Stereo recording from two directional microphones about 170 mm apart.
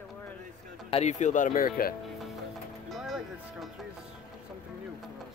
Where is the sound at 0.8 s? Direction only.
40° left (ahead or behind); by 2.0 s 60° left (ahead or behind).